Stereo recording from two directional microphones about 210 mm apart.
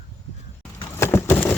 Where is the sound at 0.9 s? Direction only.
10° left (ahead or behind).